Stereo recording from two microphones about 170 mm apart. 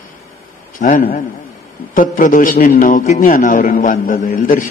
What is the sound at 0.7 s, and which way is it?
A man's voice, 50° left (ahead or behind).